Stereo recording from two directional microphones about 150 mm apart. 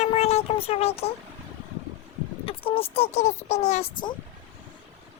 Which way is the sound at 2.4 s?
35° left (ahead or behind).